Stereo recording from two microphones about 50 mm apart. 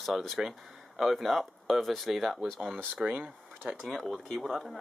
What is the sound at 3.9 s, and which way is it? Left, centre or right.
Speech, centre.